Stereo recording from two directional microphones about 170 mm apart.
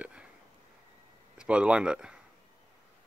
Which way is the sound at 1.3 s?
5° right (ahead or behind).